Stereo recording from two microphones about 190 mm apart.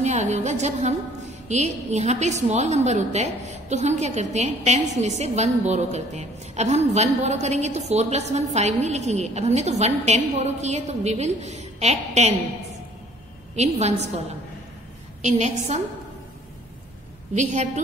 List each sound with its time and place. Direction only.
0.0 s a woman's voice: 35° right (ahead or behind)
13.6 s a woman's voice: 35° right (ahead or behind)
15.2 s a woman's voice: 35° right (ahead or behind)
17.3 s a woman's voice: 40° right (ahead or behind)